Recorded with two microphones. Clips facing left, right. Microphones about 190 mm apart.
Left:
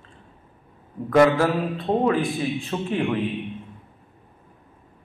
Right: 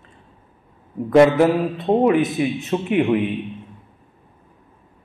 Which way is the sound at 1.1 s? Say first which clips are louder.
Right 4 dB; 20° right (ahead or behind).